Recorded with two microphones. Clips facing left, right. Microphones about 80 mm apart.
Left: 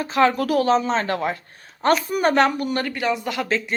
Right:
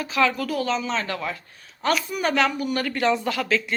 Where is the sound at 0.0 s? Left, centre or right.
Left.